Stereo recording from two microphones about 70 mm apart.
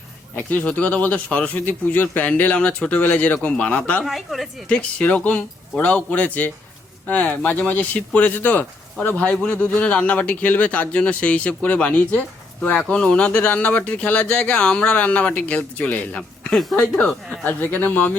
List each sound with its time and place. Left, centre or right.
0.3 s speech: left
4.0 s a woman's voice: centre
4.7 s speech: centre
17.1 s a woman's voice: centre
17.4 s speech: left